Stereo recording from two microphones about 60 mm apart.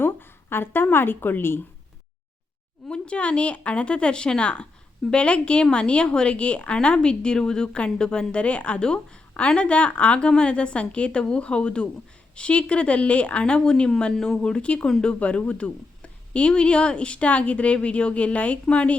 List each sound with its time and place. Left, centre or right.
0.0 s a woman's voice: left
2.9 s a woman's voice: centre